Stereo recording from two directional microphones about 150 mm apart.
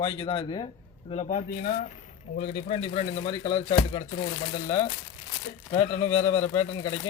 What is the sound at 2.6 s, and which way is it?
Speech, 40° left (ahead or behind).